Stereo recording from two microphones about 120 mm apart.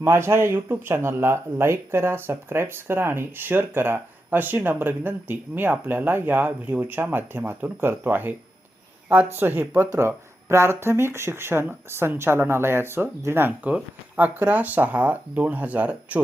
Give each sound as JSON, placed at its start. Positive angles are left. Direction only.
{"t": 0.0, "sound": "speech", "side_deg": -20}